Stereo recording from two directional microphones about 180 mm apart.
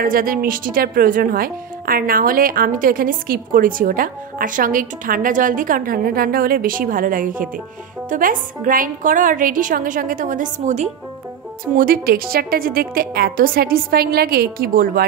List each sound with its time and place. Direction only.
0.0 s speech: 50° right (ahead or behind)
11.7 s a woman's voice: 50° right (ahead or behind)